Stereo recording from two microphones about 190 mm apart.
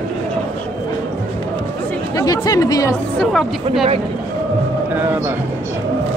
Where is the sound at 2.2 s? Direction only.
20° left (ahead or behind).